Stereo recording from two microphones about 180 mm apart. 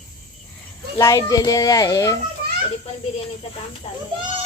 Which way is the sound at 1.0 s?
15° left (ahead or behind).